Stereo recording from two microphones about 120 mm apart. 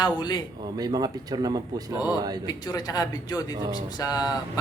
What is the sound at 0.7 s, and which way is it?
Speech, 35° right (ahead or behind).